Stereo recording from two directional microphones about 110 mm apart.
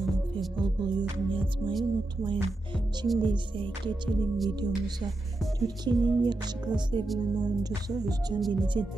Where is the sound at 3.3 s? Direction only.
45° right (ahead or behind).